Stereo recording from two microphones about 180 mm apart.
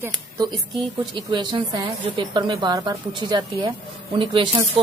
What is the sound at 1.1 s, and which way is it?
A woman's voice, 25° right (ahead or behind).